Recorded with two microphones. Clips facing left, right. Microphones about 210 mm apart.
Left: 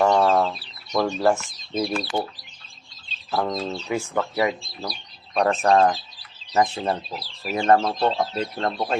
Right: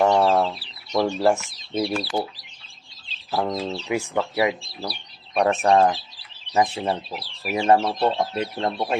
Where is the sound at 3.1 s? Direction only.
10° right (ahead or behind).